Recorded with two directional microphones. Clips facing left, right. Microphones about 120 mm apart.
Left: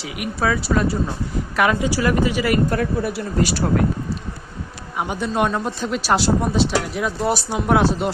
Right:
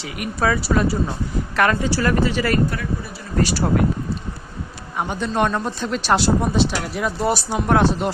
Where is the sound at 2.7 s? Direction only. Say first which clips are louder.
Left 6 dB; 55° left (ahead or behind).